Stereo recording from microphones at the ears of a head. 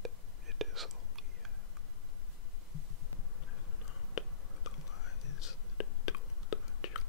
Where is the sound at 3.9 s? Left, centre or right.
Left.